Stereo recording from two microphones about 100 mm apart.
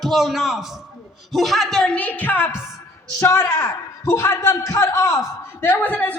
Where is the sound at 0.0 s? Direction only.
Centre (ahead or behind).